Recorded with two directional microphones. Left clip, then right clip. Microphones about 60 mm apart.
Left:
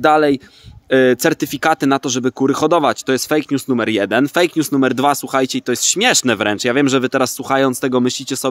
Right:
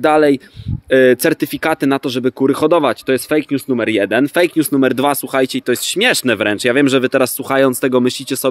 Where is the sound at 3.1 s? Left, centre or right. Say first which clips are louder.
Right 1 dB; left.